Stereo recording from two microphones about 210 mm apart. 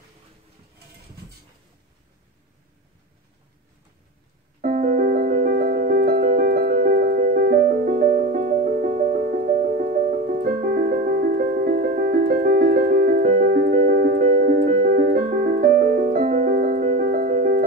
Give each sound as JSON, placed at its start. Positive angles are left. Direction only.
{"t": 4.6, "sound": "keyboard", "side_deg": -40}